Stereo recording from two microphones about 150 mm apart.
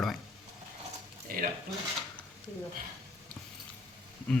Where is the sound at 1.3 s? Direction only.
65° right (ahead or behind).